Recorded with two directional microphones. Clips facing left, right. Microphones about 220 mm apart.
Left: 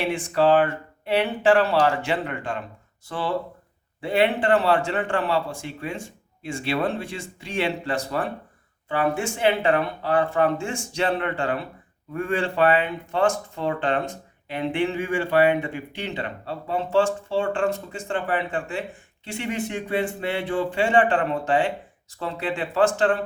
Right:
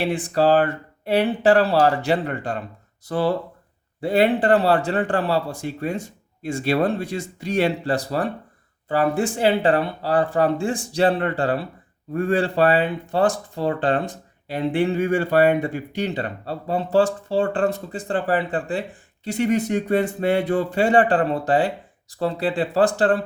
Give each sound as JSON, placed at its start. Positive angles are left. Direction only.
{"t": 0.0, "sound": "speech", "side_deg": -35}